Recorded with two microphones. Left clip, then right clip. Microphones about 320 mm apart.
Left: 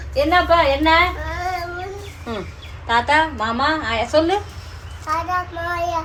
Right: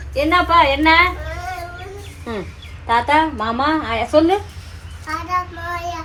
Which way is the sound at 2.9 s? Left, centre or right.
Centre.